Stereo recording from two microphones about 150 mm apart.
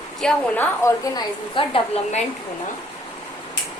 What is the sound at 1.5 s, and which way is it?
Speech, 35° left (ahead or behind).